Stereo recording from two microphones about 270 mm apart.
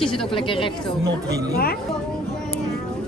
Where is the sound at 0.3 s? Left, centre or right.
Centre.